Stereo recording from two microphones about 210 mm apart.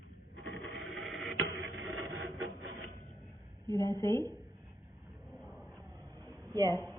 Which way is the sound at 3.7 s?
15° left (ahead or behind).